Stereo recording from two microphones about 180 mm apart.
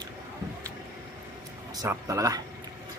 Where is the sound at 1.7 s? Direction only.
20° right (ahead or behind).